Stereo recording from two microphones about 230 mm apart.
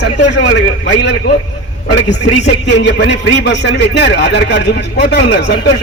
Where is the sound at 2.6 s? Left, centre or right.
Left.